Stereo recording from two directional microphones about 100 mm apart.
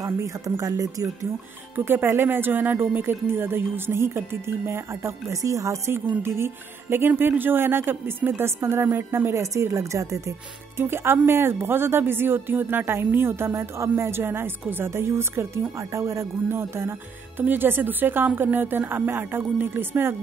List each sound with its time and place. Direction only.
0.0 s speech: 35° right (ahead or behind)
1.9 s speech: 20° right (ahead or behind)